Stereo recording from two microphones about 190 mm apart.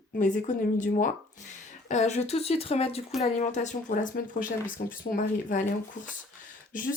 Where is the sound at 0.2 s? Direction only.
40° left (ahead or behind).